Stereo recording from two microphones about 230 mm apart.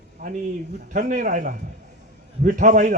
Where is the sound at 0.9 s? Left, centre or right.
Right.